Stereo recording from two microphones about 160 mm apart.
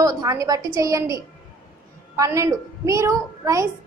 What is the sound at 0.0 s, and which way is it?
A woman's voice, 20° right (ahead or behind).